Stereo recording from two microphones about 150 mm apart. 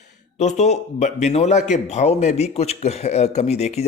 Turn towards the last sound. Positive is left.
turn(degrees=45)  # may be behind; listen again after turning